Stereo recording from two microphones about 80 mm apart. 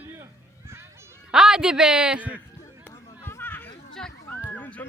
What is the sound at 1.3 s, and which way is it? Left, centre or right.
A man's voice, centre.